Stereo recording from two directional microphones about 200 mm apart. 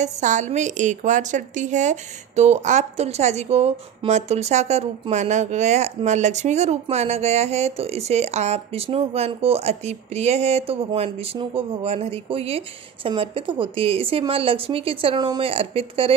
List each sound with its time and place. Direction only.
0.0 s a woman's voice: 35° right (ahead or behind)